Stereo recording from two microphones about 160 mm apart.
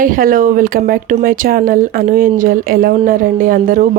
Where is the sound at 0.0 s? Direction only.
60° right (ahead or behind).